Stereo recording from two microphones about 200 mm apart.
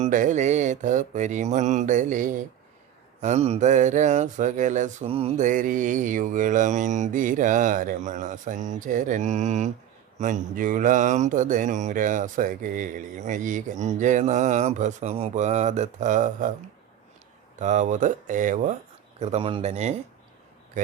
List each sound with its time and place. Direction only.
0.0 s speech: 40° right (ahead or behind)
17.6 s speech: 35° right (ahead or behind)
19.2 s a man's voice: 30° right (ahead or behind)